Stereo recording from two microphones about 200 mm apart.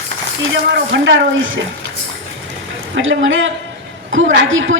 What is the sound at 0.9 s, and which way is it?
Speech, 60° right (ahead or behind).